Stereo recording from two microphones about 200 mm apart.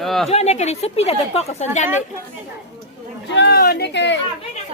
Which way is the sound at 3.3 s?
55° left (ahead or behind).